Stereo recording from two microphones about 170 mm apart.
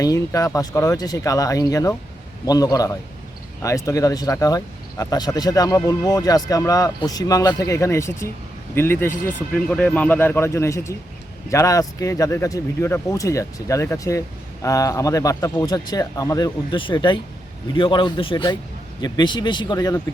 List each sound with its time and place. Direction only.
0.0 s a man's voice: 20° left (ahead or behind)